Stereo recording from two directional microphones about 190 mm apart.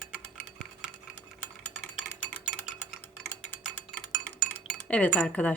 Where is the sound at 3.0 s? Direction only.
10° left (ahead or behind).